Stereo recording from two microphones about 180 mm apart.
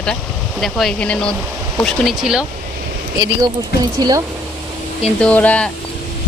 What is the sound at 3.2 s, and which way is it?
Speech, 20° right (ahead or behind).